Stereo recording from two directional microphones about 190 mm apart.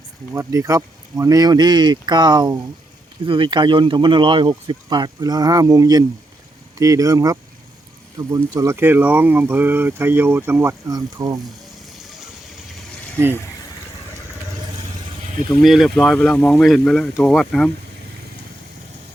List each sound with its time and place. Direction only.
0.3 s speech: 15° right (ahead or behind)
15.6 s speech: centre (ahead or behind)